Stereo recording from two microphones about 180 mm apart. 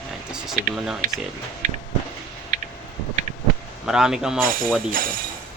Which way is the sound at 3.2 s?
45° right (ahead or behind).